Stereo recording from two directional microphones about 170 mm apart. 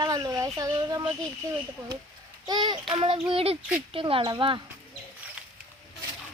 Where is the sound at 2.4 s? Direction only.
25° right (ahead or behind).